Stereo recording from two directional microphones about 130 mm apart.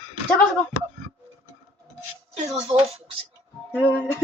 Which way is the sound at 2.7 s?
50° right (ahead or behind).